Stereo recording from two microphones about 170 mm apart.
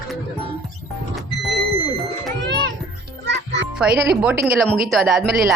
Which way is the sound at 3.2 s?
90° right.